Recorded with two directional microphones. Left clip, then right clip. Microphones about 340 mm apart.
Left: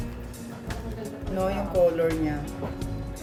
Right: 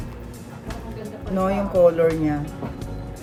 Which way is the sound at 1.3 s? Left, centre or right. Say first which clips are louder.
Right 5 dB; centre.